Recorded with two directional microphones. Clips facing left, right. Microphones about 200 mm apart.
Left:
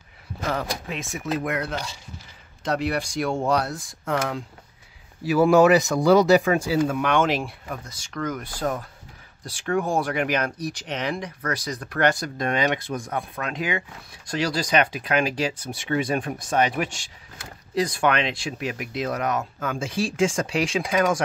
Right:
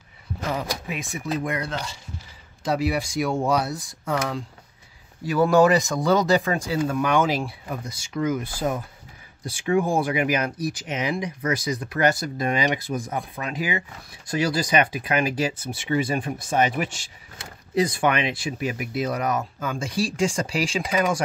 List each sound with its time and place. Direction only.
0.5 s speech: 5° right (ahead or behind)
7.0 s speech: 5° right (ahead or behind)